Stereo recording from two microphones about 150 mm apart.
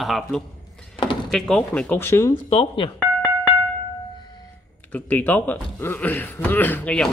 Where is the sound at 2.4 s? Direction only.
35° left (ahead or behind).